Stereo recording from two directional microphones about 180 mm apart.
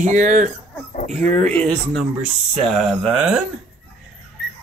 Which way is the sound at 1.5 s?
5° left (ahead or behind).